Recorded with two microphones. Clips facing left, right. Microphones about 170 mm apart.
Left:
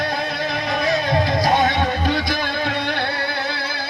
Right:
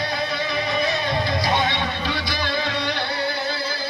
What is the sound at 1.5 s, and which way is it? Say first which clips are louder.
Music: left 5 dB; 45° left (ahead or behind).